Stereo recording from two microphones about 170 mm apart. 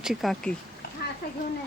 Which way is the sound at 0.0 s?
Centre (ahead or behind).